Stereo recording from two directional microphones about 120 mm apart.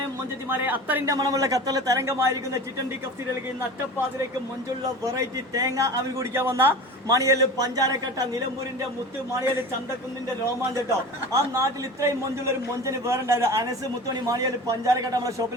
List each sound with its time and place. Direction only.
0.5 s speech: 15° right (ahead or behind)
1.0 s a man's voice: 30° right (ahead or behind)
5.1 s a man's voice: 30° right (ahead or behind)
10.8 s a man's voice: 25° right (ahead or behind)